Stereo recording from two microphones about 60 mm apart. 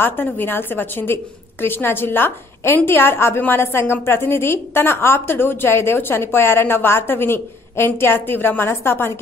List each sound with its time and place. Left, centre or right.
0.0 s a woman's voice: left